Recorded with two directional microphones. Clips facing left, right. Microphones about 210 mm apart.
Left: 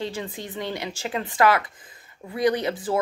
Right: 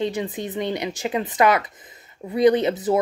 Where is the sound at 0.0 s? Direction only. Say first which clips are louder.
Right 6 dB; 20° right (ahead or behind).